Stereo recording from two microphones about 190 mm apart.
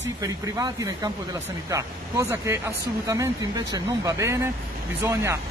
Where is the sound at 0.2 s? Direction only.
20° right (ahead or behind).